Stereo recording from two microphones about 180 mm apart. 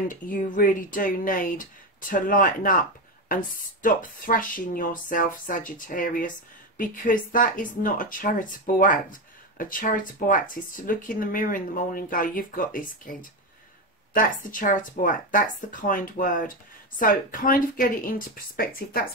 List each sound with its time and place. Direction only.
0.1 s speech: 50° left (ahead or behind)